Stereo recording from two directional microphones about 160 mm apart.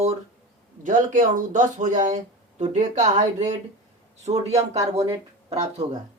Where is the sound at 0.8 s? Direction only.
55° right (ahead or behind).